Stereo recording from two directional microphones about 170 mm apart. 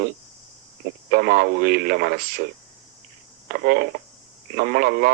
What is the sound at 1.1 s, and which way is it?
Speech, 65° right (ahead or behind).